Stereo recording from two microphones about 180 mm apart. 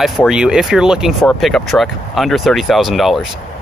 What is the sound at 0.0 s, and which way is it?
Speech, centre (ahead or behind).